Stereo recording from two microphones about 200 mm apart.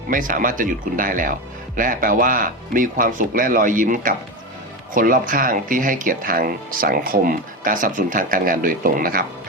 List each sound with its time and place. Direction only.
0.1 s speech: 40° right (ahead or behind)